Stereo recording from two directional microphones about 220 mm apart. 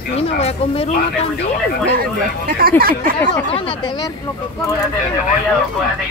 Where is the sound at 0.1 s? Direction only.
30° left (ahead or behind).